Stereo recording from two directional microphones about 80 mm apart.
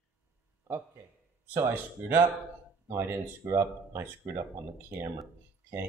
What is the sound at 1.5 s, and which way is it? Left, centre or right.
Speech, right.